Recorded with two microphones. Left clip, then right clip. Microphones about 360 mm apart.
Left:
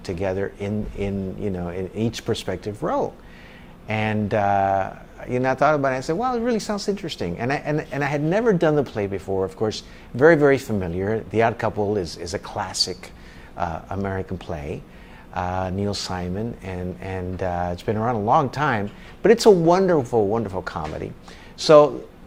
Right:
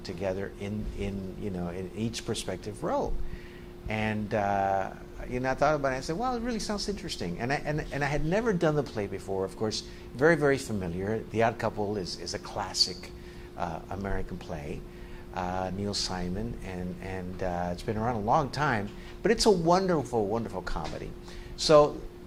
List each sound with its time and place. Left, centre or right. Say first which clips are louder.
0.0 s speech: left 8 dB; left